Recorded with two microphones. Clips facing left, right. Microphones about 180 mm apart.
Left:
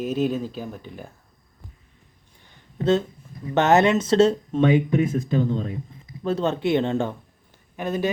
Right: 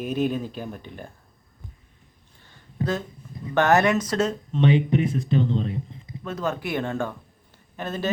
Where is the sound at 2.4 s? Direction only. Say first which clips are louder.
Right 1 dB; 20° left (ahead or behind).